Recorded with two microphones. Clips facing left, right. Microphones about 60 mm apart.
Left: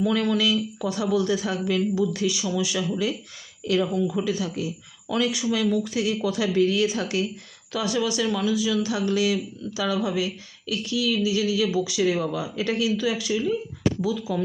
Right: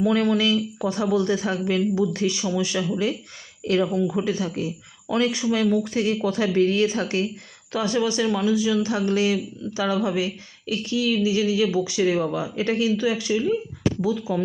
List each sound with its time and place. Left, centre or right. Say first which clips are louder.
0.0 s speech: right 2 dB; right